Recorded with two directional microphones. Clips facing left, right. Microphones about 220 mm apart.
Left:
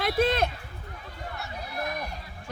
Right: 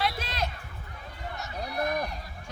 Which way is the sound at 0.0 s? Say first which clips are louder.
Left 8 dB; 55° left (ahead or behind).